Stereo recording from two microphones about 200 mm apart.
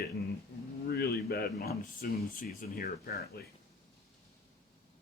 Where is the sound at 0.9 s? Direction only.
50° left (ahead or behind).